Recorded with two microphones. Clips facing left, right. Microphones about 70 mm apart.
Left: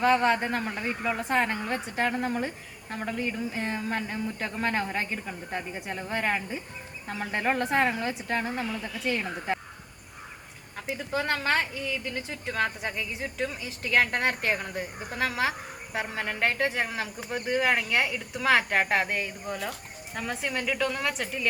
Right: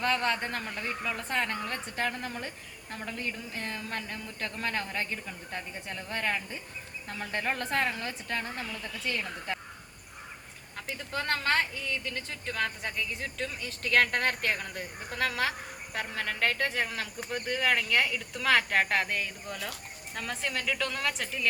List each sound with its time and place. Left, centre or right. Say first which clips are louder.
0.0 s speech: left 6 dB; centre
10.8 s a woman's voice: left 5 dB; centre